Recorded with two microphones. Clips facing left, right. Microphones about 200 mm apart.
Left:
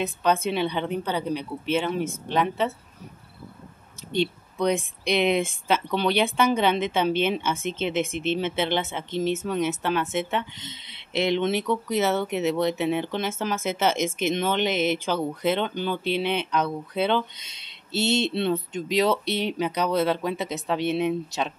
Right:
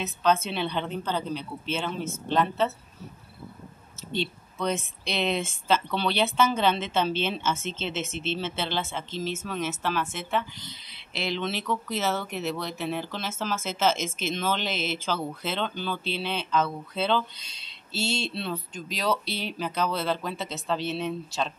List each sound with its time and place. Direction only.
0.0 s speech: 15° left (ahead or behind)
4.1 s speech: 15° left (ahead or behind)